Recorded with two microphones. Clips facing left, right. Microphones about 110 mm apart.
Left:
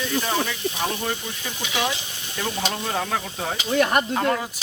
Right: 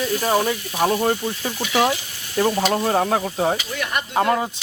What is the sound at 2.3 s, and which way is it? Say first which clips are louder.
Speech: right 8 dB; 20° right (ahead or behind).